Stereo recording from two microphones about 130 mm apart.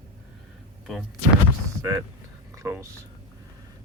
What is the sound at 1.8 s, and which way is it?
Speech, 25° right (ahead or behind).